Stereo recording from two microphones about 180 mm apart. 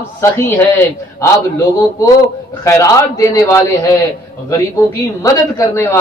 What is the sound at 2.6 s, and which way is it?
Speech, 15° left (ahead or behind).